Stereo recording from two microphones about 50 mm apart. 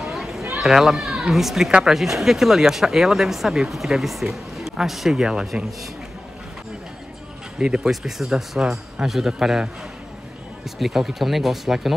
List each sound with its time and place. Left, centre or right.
0.0 s children playing: centre
0.6 s speech: centre
7.5 s speech: centre